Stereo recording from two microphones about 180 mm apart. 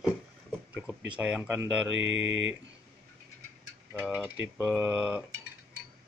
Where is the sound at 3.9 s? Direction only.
5° right (ahead or behind).